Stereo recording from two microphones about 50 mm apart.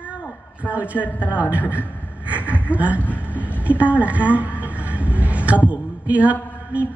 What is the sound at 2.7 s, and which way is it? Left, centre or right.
Speech, right.